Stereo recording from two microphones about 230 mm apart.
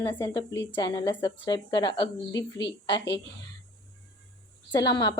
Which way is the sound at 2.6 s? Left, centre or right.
Left.